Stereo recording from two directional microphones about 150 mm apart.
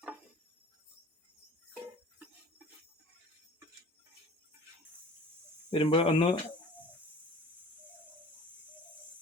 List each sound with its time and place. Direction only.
5.7 s speech: 40° left (ahead or behind)